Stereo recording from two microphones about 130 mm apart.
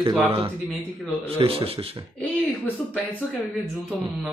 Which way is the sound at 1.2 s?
50° right (ahead or behind).